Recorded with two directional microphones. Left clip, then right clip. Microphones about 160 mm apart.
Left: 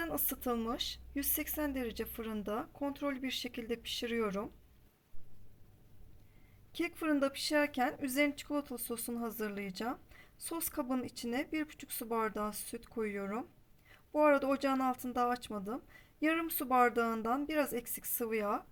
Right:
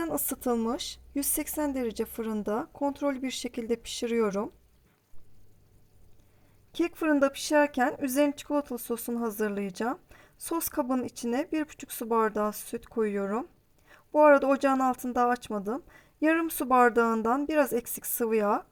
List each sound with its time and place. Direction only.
0.0 s speech: 50° right (ahead or behind)
6.7 s speech: 45° right (ahead or behind)